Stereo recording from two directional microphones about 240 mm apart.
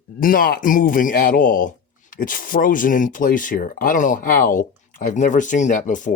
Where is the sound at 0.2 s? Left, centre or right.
Left.